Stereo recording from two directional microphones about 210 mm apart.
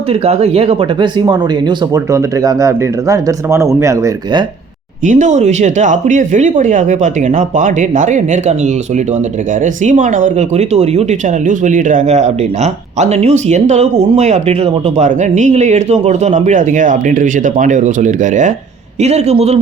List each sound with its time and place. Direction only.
0.1 s speech: 30° right (ahead or behind)
5.0 s speech: 35° right (ahead or behind)